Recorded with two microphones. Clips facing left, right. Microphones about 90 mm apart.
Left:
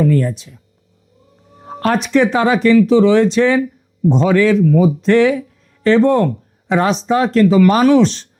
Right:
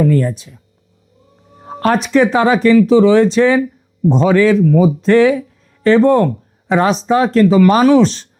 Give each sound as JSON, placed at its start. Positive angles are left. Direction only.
{"t": 0.0, "sound": "speech", "side_deg": -40}